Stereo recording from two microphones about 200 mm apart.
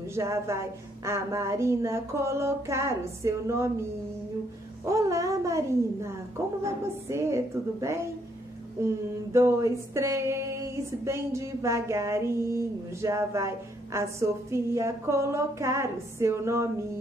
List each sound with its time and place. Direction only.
0.1 s speech: 15° right (ahead or behind)
4.8 s speech: 15° right (ahead or behind)